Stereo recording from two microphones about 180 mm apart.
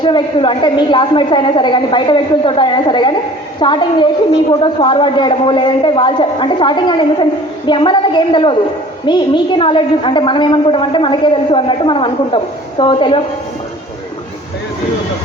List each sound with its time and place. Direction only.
0.0 s a woman's voice: 25° left (ahead or behind)